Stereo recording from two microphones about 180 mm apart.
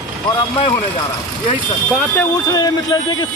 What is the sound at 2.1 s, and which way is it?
A man's voice, 20° left (ahead or behind).